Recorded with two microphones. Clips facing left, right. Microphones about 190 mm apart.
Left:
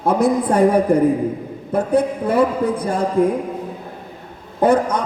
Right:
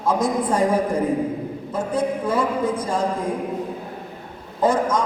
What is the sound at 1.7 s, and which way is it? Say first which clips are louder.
A man's voice: left 6 dB; 60° left (ahead or behind).